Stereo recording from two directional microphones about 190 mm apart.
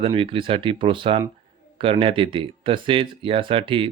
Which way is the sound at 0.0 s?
30° right (ahead or behind).